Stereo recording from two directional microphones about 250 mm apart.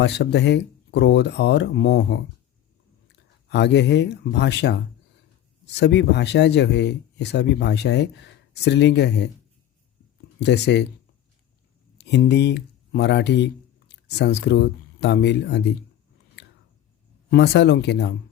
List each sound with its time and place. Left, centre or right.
0.0 s speech: left
10.4 s speech: left
11.9 s speech: left
16.4 s a sound: left
17.2 s speech: left